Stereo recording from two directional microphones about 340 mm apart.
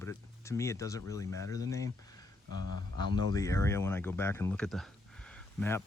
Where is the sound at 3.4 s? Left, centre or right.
Centre.